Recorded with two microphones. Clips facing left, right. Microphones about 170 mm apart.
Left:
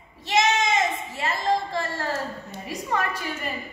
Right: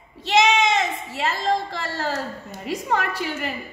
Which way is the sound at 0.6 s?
70° right (ahead or behind).